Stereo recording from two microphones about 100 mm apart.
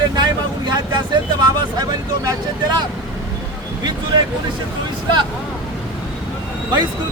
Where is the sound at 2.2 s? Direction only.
45° right (ahead or behind).